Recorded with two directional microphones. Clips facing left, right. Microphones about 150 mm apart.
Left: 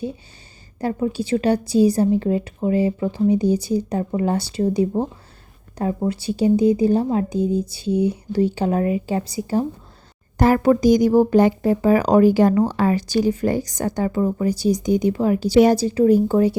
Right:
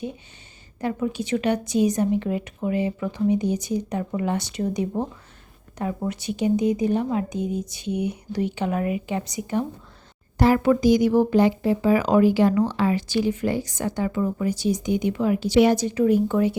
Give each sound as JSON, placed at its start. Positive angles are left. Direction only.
{"t": 0.8, "sound": "speech", "side_deg": 35}
{"t": 10.3, "sound": "speech", "side_deg": 45}